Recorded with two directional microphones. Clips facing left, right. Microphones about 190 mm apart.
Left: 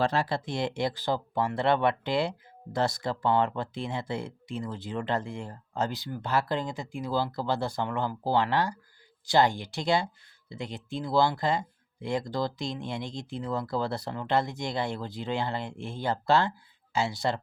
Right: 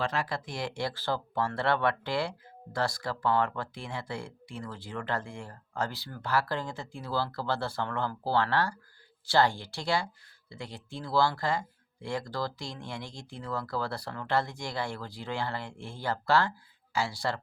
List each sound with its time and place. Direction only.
0.0 s speech: 30° left (ahead or behind)